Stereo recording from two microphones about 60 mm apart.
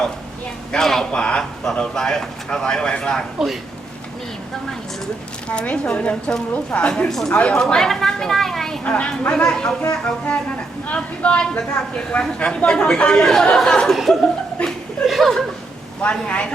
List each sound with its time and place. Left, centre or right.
0.7 s speech: centre
3.3 s speech: centre
5.5 s speech: centre
7.1 s speech: centre
8.8 s speech: centre
14.6 s chuckle: centre
15.0 s chuckle: centre
16.2 s speech: centre